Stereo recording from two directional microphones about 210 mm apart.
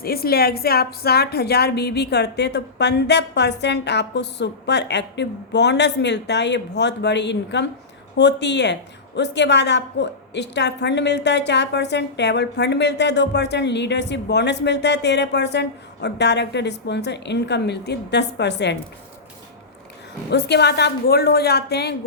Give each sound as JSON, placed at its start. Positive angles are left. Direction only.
{"t": 0.0, "sound": "a woman's voice", "side_deg": 45}
{"t": 20.3, "sound": "a woman's voice", "side_deg": 55}